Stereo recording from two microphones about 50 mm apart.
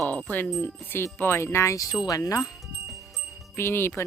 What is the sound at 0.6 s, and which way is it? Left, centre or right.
Music, left.